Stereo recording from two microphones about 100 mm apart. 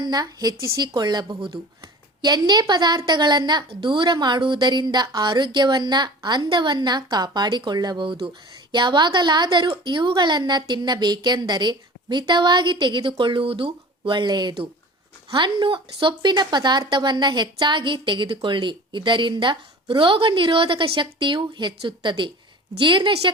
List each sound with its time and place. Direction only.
0.0 s a woman's voice: 40° right (ahead or behind)